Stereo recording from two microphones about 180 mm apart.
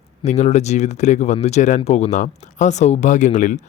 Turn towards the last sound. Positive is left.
turn(degrees=45)  # may be behind; listen again after turning